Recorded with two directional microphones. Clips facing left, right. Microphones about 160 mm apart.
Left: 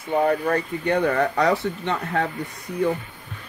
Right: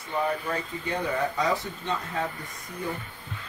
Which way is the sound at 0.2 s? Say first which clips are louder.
Left 7 dB; 65° left (ahead or behind).